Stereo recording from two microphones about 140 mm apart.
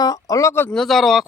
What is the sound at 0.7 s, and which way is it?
Speech, centre (ahead or behind).